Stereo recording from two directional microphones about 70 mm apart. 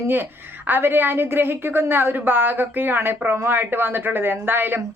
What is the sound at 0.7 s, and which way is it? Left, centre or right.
A woman's voice, right.